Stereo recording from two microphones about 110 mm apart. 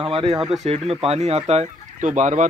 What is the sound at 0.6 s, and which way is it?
Speech, 70° right (ahead or behind).